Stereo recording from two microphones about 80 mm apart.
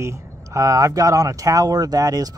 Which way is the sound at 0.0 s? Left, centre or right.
Right.